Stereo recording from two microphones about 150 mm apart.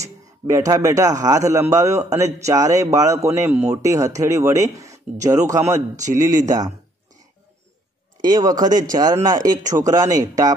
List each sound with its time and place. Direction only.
0.0 s a man's voice: 20° right (ahead or behind)
5.8 s a man's voice: 55° right (ahead or behind)
8.2 s a man's voice: 30° right (ahead or behind)
9.6 s speech: 55° right (ahead or behind)
9.8 s a man's voice: 25° right (ahead or behind)